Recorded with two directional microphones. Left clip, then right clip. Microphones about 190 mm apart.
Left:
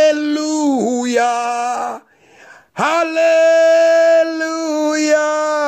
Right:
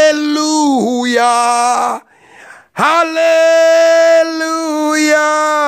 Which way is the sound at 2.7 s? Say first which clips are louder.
Right 4 dB; 15° right (ahead or behind).